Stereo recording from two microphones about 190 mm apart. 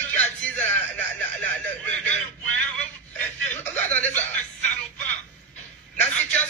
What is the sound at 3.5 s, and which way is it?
Chuckle, 10° left (ahead or behind).